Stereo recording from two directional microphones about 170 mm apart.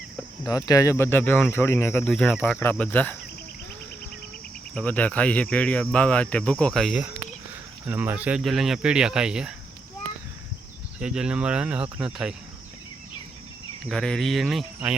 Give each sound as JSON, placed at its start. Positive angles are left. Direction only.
{"t": 0.4, "sound": "cricket", "side_deg": 20}
{"t": 2.0, "sound": "cricket", "side_deg": 5}
{"t": 4.7, "sound": "cricket", "side_deg": 10}
{"t": 7.9, "sound": "speech", "side_deg": -10}
{"t": 11.0, "sound": "speech", "side_deg": -5}
{"t": 13.8, "sound": "speech", "side_deg": 0}